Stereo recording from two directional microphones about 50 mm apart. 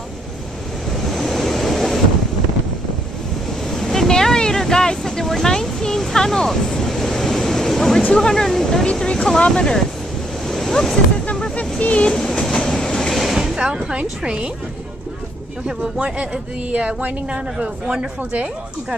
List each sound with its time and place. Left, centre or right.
1.1 s waves: centre
3.7 s vehicle: centre
8.1 s speech: centre
9.0 s speech: centre
10.5 s waves: centre
11.5 s speech: left
12.1 s train: centre
13.2 s vehicle: centre
13.6 s speech: centre
16.7 s speech: right